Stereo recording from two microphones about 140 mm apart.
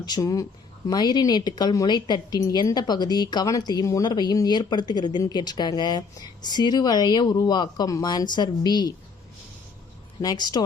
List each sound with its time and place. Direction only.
0.0 s a woman's voice: 30° left (ahead or behind)
10.2 s speech: 30° left (ahead or behind)